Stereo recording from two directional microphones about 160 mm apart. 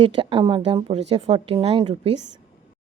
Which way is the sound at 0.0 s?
30° right (ahead or behind).